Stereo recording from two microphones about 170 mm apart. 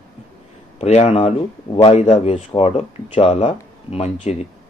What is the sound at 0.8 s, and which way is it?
Speech, 40° left (ahead or behind).